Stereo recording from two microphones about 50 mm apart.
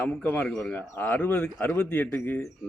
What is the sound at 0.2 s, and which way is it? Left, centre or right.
Speech, left.